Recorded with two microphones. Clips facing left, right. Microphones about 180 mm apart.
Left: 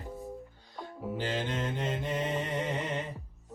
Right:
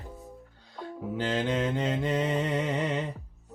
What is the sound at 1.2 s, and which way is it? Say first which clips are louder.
Mantra: right 6 dB; 70° right (ahead or behind).